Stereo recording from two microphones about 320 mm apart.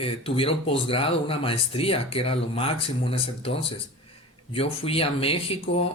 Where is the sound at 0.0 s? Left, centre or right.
Centre.